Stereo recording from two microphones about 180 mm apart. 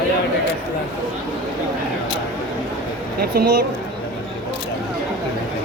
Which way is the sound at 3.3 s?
60° right (ahead or behind).